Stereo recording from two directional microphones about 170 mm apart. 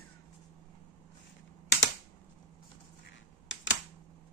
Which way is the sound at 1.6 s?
90° left.